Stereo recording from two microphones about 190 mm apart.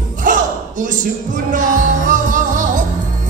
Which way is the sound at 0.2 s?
40° right (ahead or behind).